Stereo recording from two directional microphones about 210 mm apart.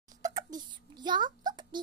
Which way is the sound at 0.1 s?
15° right (ahead or behind).